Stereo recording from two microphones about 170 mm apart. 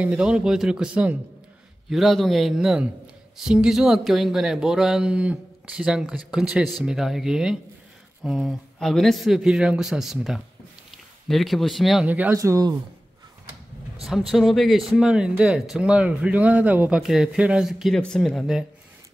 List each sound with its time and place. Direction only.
0.0 s speech: 5° right (ahead or behind)
12.4 s speech: 20° right (ahead or behind)
14.0 s speech: centre (ahead or behind)